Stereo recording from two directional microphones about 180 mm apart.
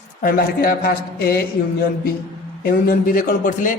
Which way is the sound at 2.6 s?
55° left (ahead or behind).